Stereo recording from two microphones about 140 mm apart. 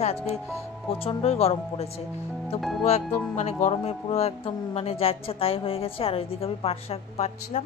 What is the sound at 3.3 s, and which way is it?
Speech, 55° left (ahead or behind).